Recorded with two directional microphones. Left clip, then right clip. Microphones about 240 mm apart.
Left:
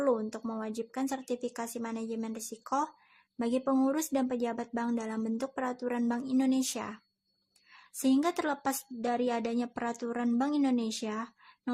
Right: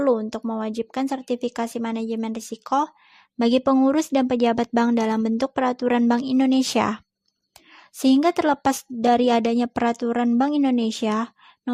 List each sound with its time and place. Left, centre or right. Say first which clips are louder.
0.0 s a woman's voice: right 9 dB; right